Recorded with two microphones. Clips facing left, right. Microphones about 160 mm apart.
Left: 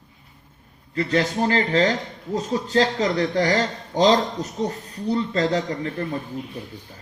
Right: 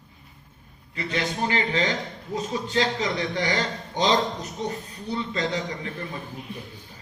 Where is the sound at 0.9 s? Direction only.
40° left (ahead or behind).